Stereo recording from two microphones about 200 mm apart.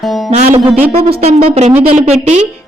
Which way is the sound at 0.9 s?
30° right (ahead or behind).